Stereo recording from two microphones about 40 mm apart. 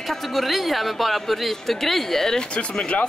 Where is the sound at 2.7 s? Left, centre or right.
Left.